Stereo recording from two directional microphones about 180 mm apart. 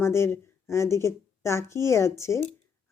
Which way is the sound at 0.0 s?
15° left (ahead or behind).